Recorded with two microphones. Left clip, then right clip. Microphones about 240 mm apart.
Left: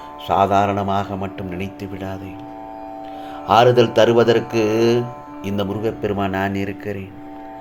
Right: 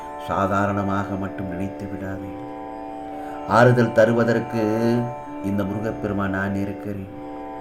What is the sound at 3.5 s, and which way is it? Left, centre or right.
Speech, centre.